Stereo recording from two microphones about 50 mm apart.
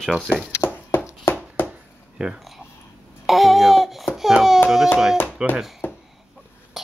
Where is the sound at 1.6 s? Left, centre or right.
Left.